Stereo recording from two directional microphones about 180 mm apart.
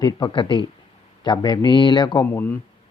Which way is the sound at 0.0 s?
25° left (ahead or behind).